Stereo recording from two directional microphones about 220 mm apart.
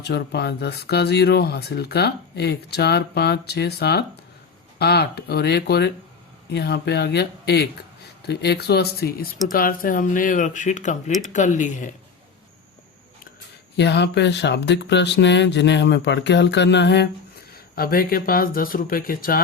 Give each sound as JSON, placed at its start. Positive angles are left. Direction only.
{"t": 0.0, "sound": "speech", "side_deg": 50}
{"t": 13.7, "sound": "speech", "side_deg": 50}